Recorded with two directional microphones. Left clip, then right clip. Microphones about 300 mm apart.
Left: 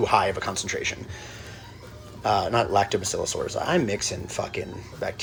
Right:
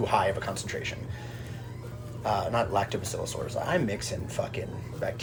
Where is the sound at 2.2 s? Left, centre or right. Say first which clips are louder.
Left 5 dB; centre.